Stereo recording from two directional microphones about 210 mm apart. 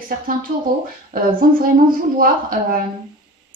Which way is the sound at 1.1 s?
45° right (ahead or behind).